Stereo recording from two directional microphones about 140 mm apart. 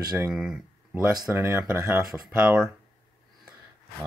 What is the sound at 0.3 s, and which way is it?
Speech, 5° right (ahead or behind).